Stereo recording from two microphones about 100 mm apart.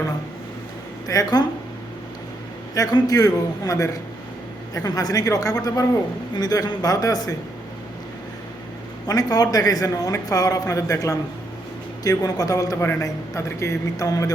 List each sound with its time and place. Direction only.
1.0 s speech: 35° left (ahead or behind)
2.7 s speech: 35° left (ahead or behind)
9.0 s speech: 40° left (ahead or behind)